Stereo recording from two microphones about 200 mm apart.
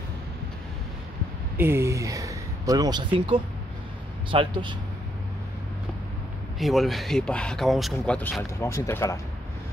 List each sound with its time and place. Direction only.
1.6 s speech: 10° right (ahead or behind)
6.6 s speech: centre (ahead or behind)